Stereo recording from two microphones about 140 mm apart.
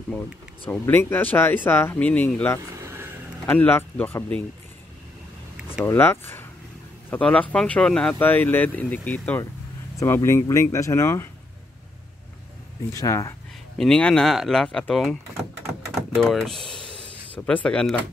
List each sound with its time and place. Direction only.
0.1 s speech: 15° left (ahead or behind)
2.7 s vehicle: 20° right (ahead or behind)
3.4 s speech: 15° left (ahead or behind)
5.9 s speech: 15° left (ahead or behind)
12.9 s speech: 25° left (ahead or behind)
13.7 s speech: 5° left (ahead or behind)
16.3 s speech: centre (ahead or behind)